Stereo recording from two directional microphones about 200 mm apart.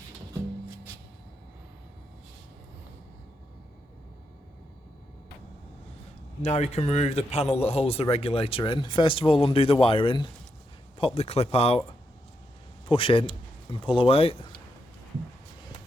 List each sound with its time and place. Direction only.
6.4 s a man's voice: 35° left (ahead or behind)
12.8 s speech: 25° left (ahead or behind)